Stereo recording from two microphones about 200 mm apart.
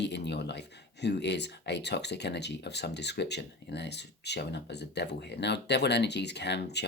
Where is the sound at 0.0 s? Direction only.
60° left (ahead or behind).